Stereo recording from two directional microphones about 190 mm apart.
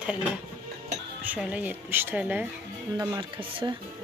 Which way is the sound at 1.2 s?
5° right (ahead or behind).